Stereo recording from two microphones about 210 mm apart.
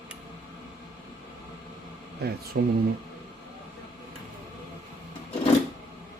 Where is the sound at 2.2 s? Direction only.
50° right (ahead or behind).